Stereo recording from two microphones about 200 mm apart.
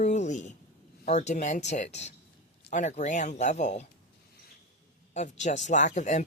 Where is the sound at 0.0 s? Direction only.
35° left (ahead or behind).